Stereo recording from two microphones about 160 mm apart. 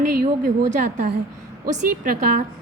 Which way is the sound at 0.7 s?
50° right (ahead or behind).